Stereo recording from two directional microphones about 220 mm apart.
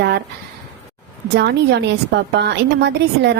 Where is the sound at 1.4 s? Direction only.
50° right (ahead or behind).